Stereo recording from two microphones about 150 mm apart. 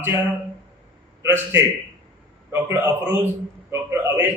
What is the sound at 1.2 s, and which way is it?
A man's voice, 15° right (ahead or behind).